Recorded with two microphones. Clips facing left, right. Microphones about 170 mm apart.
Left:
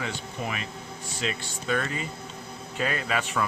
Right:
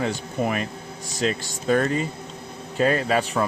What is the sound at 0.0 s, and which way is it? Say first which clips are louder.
Speech: right 8 dB; 45° right (ahead or behind).